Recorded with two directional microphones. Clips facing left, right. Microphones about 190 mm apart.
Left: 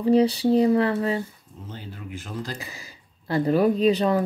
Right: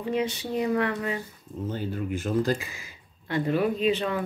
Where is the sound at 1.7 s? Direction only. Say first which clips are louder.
Right 7 dB; 50° right (ahead or behind).